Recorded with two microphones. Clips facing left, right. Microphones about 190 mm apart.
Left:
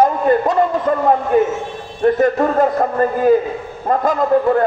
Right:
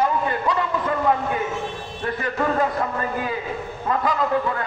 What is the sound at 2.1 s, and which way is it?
Speech, 45° left (ahead or behind).